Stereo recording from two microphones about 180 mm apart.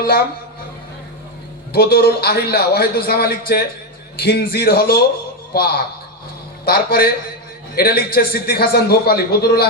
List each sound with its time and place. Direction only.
1.7 s a man's voice: 60° left (ahead or behind)